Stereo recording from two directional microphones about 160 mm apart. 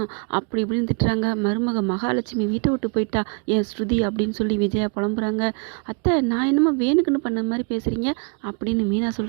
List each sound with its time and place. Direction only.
0.3 s a woman's voice: 35° right (ahead or behind)